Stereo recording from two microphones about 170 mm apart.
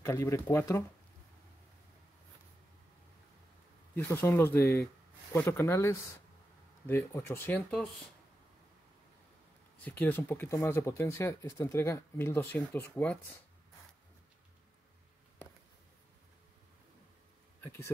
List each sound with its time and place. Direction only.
0.0 s speech: 15° left (ahead or behind)
3.9 s speech: 15° left (ahead or behind)
9.8 s speech: 10° left (ahead or behind)
17.6 s speech: 15° left (ahead or behind)